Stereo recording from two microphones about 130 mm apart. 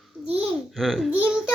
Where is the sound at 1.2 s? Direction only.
10° right (ahead or behind).